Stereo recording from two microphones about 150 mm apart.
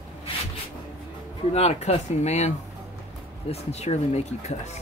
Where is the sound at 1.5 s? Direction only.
45° left (ahead or behind).